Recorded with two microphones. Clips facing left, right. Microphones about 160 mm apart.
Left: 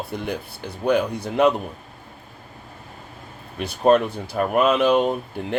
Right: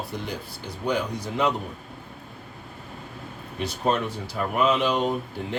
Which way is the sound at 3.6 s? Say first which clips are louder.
Left 8 dB; 60° left (ahead or behind).